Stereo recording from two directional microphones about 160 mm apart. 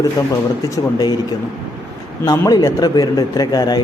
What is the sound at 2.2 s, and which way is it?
Speech, 25° left (ahead or behind).